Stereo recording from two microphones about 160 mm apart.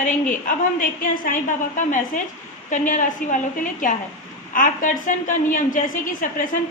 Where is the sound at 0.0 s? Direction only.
55° left (ahead or behind).